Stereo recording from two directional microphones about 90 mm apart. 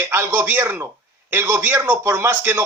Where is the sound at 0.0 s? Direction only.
30° right (ahead or behind).